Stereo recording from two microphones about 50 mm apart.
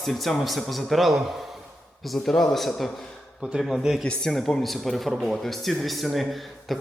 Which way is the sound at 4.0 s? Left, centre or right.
Centre.